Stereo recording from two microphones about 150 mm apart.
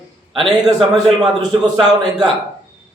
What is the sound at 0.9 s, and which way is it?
Speech, 25° right (ahead or behind).